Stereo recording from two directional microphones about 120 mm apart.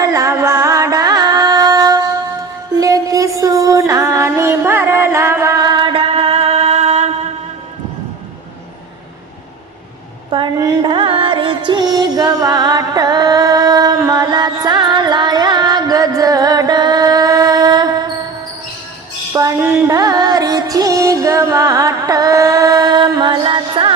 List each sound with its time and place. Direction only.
0.0 s music: 25° right (ahead or behind)
5.8 s music: 50° right (ahead or behind)
10.3 s a sound: 40° right (ahead or behind)
10.8 s music: 45° right (ahead or behind)
19.3 s a sound: 25° right (ahead or behind)
19.9 s music: 30° right (ahead or behind)